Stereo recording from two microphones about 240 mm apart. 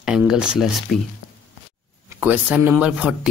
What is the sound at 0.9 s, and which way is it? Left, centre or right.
Speech, left.